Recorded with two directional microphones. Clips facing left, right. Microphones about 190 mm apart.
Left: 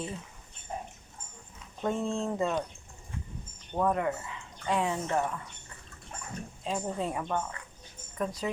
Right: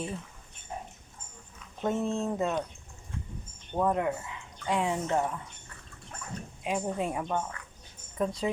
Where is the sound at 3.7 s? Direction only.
10° right (ahead or behind).